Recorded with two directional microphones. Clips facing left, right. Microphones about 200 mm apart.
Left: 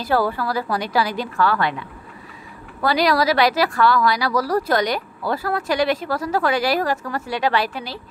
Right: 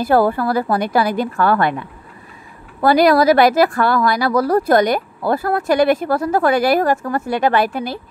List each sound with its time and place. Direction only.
0.0 s a woman's voice: 50° right (ahead or behind)